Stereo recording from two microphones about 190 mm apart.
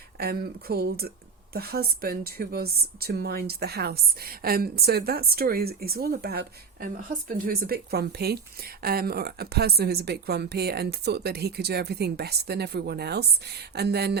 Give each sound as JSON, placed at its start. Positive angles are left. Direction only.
{"t": 0.2, "sound": "a woman's voice", "side_deg": -55}